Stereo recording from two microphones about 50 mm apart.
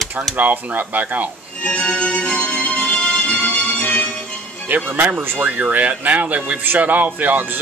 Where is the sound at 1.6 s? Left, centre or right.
Left.